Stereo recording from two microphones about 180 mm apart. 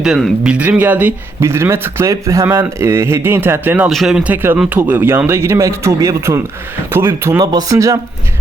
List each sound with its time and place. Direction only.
0.0 s speech: centre (ahead or behind); by 7.9 s 20° right (ahead or behind)